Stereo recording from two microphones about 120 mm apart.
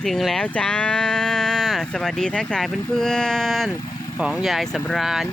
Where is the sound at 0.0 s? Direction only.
Centre (ahead or behind).